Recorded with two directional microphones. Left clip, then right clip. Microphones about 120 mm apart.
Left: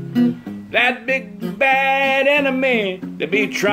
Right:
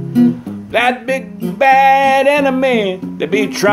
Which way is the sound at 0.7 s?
15° left (ahead or behind).